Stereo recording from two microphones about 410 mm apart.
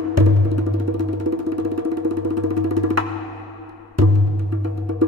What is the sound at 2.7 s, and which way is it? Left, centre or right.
Music, right.